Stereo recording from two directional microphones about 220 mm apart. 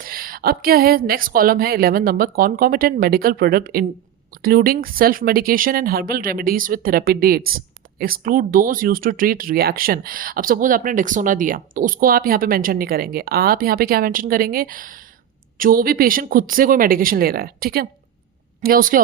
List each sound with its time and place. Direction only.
0.0 s speech: 40° right (ahead or behind)